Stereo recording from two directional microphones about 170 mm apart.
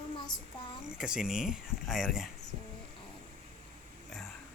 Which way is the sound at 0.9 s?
5° right (ahead or behind).